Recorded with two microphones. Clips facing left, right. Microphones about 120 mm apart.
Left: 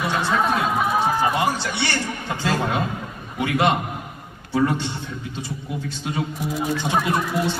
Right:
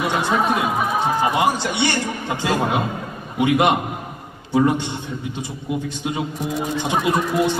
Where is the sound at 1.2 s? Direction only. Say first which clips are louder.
Right 2 dB; 15° right (ahead or behind).